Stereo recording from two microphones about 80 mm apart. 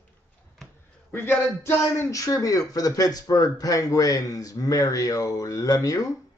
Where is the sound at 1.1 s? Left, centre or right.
Left.